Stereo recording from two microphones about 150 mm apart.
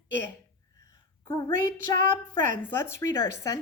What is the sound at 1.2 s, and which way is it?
Speech, 25° left (ahead or behind).